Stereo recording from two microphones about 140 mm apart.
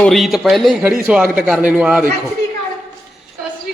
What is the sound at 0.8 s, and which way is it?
A man's voice, 10° right (ahead or behind).